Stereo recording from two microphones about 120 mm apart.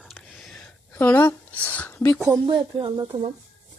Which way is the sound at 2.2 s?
25° right (ahead or behind).